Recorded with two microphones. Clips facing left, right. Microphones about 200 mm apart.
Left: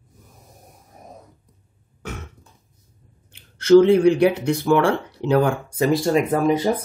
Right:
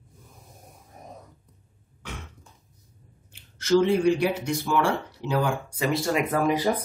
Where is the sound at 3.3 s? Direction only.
60° left (ahead or behind).